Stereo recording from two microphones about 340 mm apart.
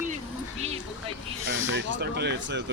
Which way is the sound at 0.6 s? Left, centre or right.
Centre.